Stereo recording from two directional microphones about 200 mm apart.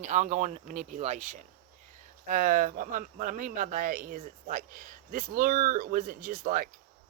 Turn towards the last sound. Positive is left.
turn(degrees=-45)  # may be behind; listen again after turning